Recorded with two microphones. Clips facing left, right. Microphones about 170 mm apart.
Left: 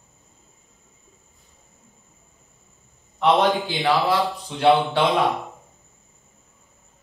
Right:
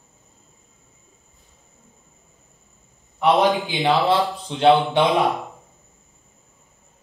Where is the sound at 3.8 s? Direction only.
20° right (ahead or behind).